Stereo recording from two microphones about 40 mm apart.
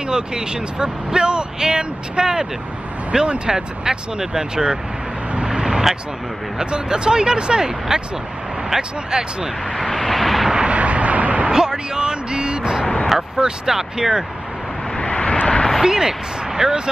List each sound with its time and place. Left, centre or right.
0.0 s speech: centre
5.5 s vehicle: centre
6.6 s speech: right
9.7 s vehicle: centre
10.7 s a sound: right
11.5 s vehicle: centre
13.4 s speech: centre
15.0 s vehicle: left
15.4 s a sound: centre
15.8 s speech: centre